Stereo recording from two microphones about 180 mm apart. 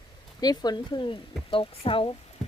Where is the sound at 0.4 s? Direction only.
20° left (ahead or behind).